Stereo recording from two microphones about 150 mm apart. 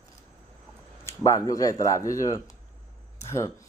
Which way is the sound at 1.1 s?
20° left (ahead or behind).